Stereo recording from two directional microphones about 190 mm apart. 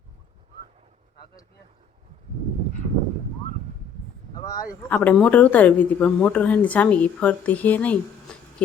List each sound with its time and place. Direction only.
4.4 s speech: 20° left (ahead or behind)
4.9 s speech: 5° left (ahead or behind)